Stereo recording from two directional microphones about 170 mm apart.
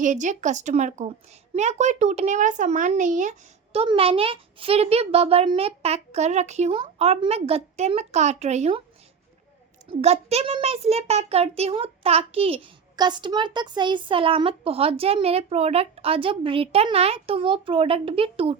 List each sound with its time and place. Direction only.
0.0 s speech: 45° right (ahead or behind)
10.0 s speech: 35° right (ahead or behind)